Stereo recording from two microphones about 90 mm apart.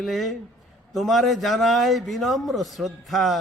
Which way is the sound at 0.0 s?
Centre (ahead or behind).